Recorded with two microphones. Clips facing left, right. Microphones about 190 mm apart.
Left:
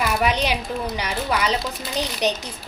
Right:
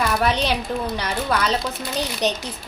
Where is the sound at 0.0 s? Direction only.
10° left (ahead or behind).